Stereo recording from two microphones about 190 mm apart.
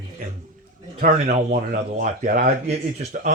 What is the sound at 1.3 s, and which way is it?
Speech, 40° right (ahead or behind).